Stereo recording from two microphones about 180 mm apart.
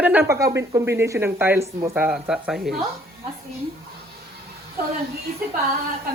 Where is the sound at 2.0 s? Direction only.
5° right (ahead or behind).